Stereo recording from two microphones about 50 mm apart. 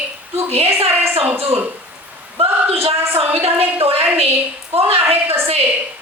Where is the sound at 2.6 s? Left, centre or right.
Right.